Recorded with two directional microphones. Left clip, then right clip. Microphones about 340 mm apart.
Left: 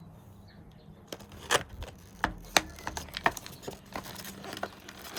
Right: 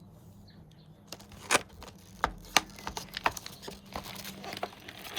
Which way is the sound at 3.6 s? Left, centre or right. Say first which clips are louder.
Left 3 dB; centre.